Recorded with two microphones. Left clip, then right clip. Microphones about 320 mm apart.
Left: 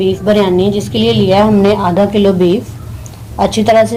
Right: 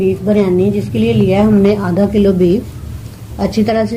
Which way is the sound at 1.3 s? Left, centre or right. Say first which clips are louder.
Left 3 dB; left.